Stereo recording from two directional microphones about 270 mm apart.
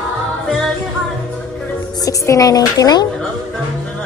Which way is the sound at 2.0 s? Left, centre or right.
Centre.